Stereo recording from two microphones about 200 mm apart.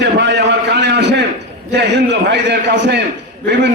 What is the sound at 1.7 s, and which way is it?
A man's voice, 60° right (ahead or behind).